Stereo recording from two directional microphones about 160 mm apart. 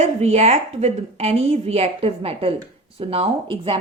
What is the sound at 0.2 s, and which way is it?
A woman's voice, 40° right (ahead or behind).